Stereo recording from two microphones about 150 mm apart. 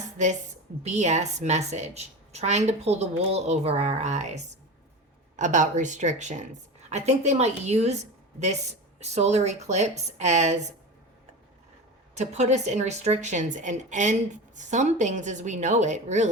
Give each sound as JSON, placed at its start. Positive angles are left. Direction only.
{"t": 0.8, "sound": "speech", "side_deg": -50}
{"t": 9.0, "sound": "speech", "side_deg": -50}
{"t": 12.1, "sound": "speech", "side_deg": -50}